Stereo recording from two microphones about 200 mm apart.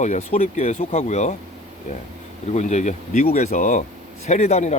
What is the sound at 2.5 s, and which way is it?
Speech, 35° left (ahead or behind).